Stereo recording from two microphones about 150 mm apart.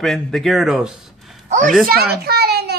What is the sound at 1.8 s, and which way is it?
Speech, 90° right.